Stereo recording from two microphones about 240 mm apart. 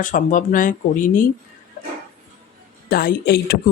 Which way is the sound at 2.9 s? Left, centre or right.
Left.